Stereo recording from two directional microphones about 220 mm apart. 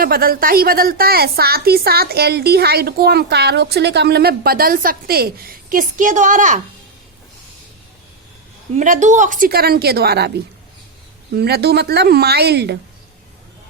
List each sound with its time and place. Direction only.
0.0 s a woman's voice: 40° right (ahead or behind)
8.8 s a woman's voice: 35° right (ahead or behind)
11.3 s a woman's voice: 45° right (ahead or behind)